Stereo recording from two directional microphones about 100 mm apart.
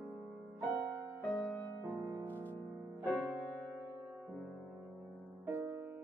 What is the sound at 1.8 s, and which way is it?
Music, 25° right (ahead or behind).